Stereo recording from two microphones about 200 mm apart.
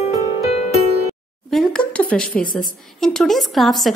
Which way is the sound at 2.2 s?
45° left (ahead or behind).